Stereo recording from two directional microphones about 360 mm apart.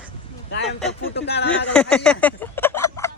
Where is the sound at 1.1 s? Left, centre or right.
Left.